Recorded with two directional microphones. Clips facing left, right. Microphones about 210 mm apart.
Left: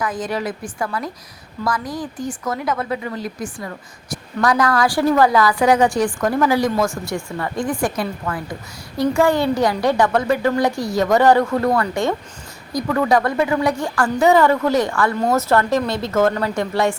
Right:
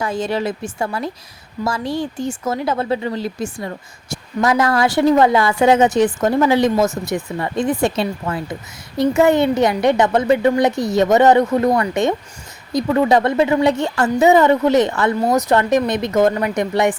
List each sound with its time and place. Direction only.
0.0 s speech: 25° right (ahead or behind)